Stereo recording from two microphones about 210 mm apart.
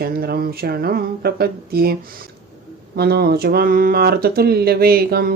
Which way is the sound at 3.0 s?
50° right (ahead or behind).